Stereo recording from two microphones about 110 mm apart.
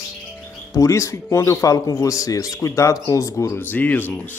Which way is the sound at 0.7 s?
30° left (ahead or behind).